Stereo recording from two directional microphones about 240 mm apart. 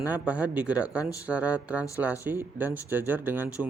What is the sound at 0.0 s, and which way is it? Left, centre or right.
Speech, centre.